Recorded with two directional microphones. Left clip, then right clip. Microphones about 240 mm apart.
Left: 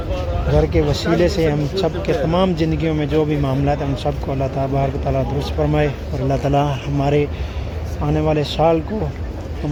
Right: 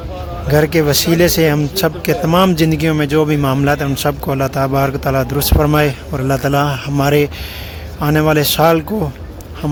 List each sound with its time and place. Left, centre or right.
0.5 s speech: right